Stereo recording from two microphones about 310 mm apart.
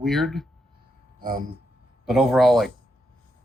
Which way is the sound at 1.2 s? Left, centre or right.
Right.